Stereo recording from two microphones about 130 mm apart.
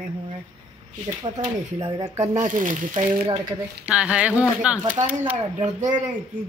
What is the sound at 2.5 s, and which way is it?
Speech, 80° right.